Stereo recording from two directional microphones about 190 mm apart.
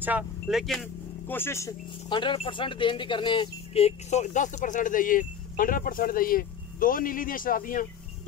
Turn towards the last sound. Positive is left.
turn(degrees=45)  # may be behind; listen again after turning